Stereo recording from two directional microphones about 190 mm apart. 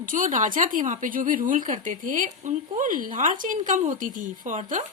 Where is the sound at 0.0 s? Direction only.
45° right (ahead or behind).